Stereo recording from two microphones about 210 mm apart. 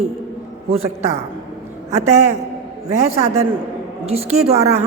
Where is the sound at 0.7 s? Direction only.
30° right (ahead or behind).